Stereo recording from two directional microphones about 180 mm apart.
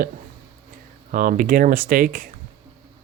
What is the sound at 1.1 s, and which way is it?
Speech, 50° right (ahead or behind).